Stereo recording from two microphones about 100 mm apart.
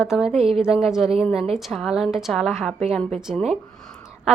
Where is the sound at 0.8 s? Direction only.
5° right (ahead or behind).